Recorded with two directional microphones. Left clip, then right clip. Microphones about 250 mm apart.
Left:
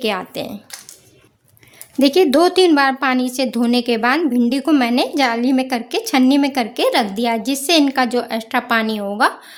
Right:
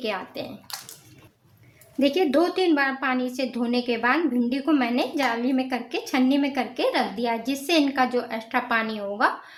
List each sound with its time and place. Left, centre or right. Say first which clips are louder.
0.0 s a woman's voice: left 8 dB; left
2.0 s a woman's voice: left 8 dB; left